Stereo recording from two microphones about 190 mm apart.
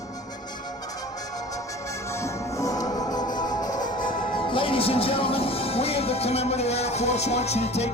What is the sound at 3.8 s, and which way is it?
Music, 45° left (ahead or behind).